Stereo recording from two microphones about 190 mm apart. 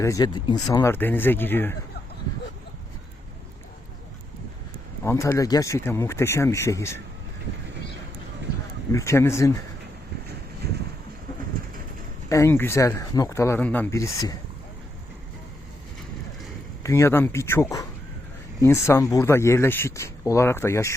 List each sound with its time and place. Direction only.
0.0 s speech: 15° left (ahead or behind)
5.0 s speech: 15° left (ahead or behind)
8.9 s speech: 15° left (ahead or behind)
10.6 s a sound: 60° right (ahead or behind)
12.3 s speech: 15° left (ahead or behind)
16.8 s speech: 15° left (ahead or behind)